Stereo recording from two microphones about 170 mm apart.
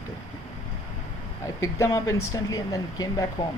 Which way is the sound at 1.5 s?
15° left (ahead or behind).